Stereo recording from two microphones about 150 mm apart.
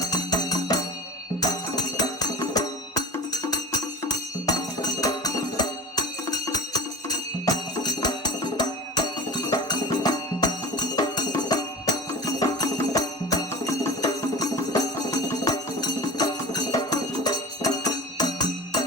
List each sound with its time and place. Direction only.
0.0 s music: 25° left (ahead or behind)